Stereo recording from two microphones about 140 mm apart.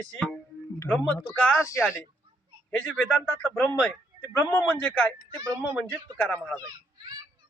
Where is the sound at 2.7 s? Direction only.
5° left (ahead or behind).